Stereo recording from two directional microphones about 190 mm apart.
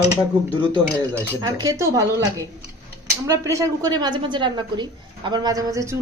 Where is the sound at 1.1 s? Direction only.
10° right (ahead or behind).